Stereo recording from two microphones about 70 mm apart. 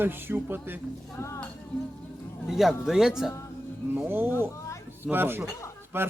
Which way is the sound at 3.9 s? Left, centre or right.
Right.